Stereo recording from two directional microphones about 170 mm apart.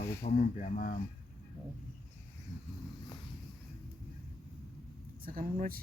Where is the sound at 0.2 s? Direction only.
45° left (ahead or behind).